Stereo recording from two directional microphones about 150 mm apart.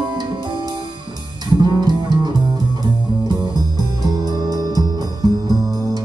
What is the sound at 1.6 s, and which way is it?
Music, 25° right (ahead or behind).